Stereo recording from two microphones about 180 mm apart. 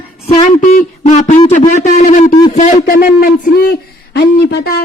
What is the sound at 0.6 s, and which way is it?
Speech, 45° left (ahead or behind).